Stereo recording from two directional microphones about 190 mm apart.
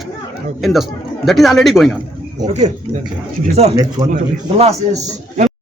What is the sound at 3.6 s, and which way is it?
Speech, 35° right (ahead or behind).